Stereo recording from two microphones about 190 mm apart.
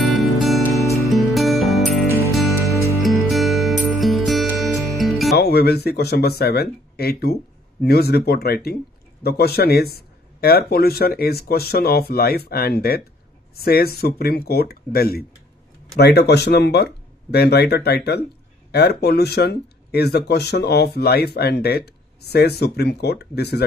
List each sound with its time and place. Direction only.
0.1 s music: centre (ahead or behind)
5.3 s speech: 60° left (ahead or behind)